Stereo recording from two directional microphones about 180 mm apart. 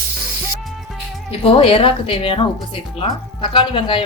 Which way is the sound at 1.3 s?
30° left (ahead or behind).